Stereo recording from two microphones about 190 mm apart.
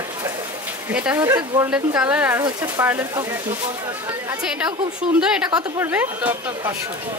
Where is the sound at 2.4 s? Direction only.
20° right (ahead or behind).